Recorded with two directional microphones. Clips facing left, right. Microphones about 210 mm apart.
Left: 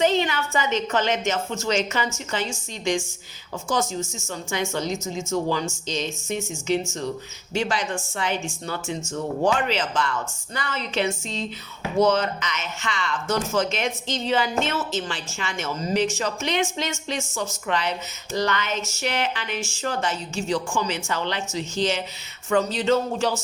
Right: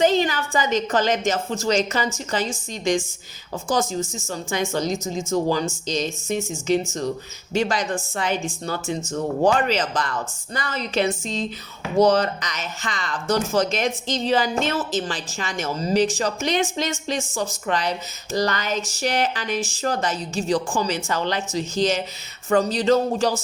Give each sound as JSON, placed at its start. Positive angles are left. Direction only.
{"t": 0.0, "sound": "speech", "side_deg": -35}